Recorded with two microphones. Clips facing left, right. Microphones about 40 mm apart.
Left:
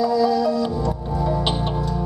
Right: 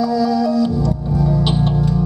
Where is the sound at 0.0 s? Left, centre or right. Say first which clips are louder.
Right 1 dB; centre.